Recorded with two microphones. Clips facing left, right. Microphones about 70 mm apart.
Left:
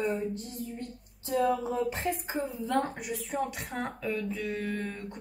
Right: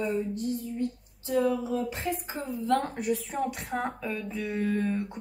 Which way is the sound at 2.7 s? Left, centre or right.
Centre.